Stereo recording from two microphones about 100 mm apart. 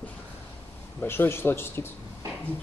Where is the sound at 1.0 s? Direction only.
25° left (ahead or behind).